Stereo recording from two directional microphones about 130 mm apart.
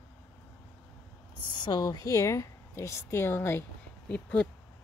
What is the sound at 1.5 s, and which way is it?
A woman's voice, 35° left (ahead or behind).